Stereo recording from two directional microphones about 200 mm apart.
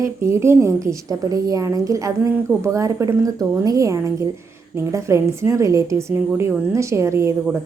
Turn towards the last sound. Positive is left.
turn(degrees=-15)  # may be behind; listen again after turning